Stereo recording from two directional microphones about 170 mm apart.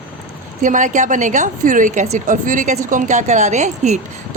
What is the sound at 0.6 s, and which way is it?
A woman's voice, 50° right (ahead or behind).